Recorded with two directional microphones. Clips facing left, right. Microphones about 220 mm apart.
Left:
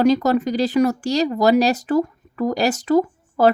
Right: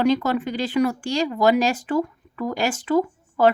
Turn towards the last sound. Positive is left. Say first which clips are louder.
# left 2 dB
turn(degrees=40)  # may be behind; listen again after turning